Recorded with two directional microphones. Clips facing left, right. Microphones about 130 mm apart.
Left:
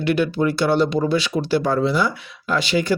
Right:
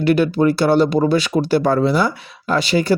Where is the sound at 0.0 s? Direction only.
40° right (ahead or behind).